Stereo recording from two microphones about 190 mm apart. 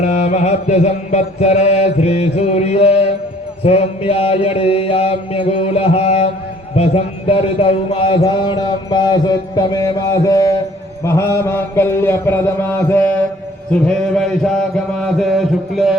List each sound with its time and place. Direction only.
0.0 s mantra: 35° left (ahead or behind)
6.7 s speech: 30° left (ahead or behind)
11.0 s mantra: 15° left (ahead or behind); by 16.0 s centre (ahead or behind)